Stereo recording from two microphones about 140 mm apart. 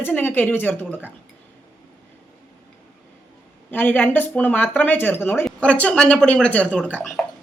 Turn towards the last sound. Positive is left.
turn(degrees=10)  # may be behind; listen again after turning